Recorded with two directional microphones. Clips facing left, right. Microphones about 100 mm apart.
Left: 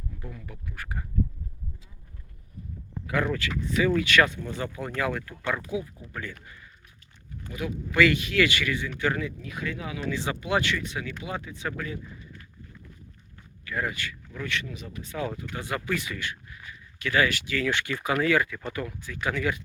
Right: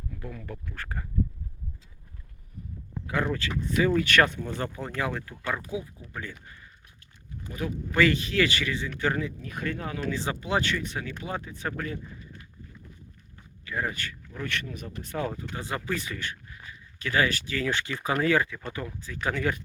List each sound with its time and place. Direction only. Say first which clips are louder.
0.1 s a sound: right 2 dB; 20° left (ahead or behind)
0.4 s speech: right 2 dB; 5° left (ahead or behind)
3.1 s speech: left 1 dB; 30° right (ahead or behind)
4.9 s speech: left 2 dB; 25° right (ahead or behind)
7.5 s speech: left 1 dB; 35° right (ahead or behind)
13.7 s speech: left 1 dB; 25° right (ahead or behind)
13.9 s speech: left 1 dB; 40° right (ahead or behind)
14.8 s speech: right 2 dB; 35° right (ahead or behind)